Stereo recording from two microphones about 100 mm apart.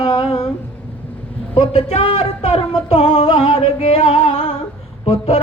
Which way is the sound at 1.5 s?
75° left (ahead or behind).